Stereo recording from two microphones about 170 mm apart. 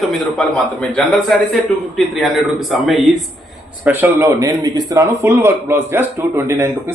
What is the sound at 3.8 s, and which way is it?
A man's voice, 15° right (ahead or behind).